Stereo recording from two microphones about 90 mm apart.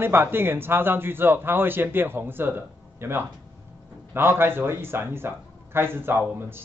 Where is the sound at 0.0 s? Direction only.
25° right (ahead or behind).